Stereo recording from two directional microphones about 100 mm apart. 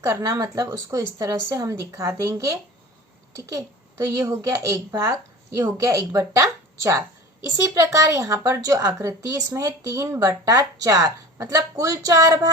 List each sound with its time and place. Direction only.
0.0 s speech: 35° right (ahead or behind)